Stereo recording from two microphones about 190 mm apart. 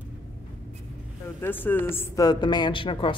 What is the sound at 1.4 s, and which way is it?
Speech, 10° left (ahead or behind).